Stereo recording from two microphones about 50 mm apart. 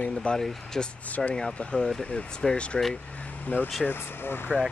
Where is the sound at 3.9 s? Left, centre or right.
Left.